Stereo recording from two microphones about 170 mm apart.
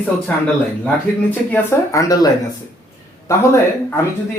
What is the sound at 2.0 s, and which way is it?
Speech, 20° left (ahead or behind).